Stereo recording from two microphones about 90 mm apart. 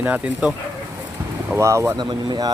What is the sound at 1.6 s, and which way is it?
Speech, 30° right (ahead or behind).